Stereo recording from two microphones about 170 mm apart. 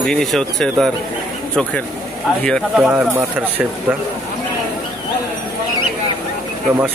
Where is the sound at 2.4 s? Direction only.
5° left (ahead or behind).